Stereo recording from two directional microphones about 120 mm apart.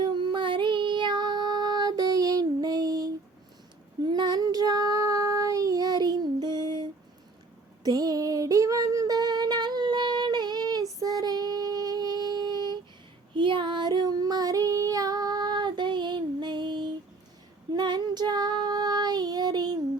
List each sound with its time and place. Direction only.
0.0 s child singing: 40° right (ahead or behind)
7.9 s female singing: 30° right (ahead or behind)
13.3 s child singing: 40° right (ahead or behind)